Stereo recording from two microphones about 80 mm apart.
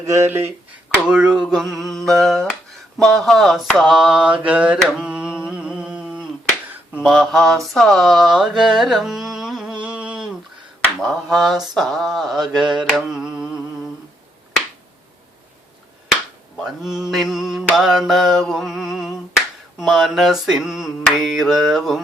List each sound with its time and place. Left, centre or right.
0.0 s speech: right
1.0 s mantra: centre
7.7 s carnatic music: centre
11.0 s mantra: centre
16.6 s mantra: centre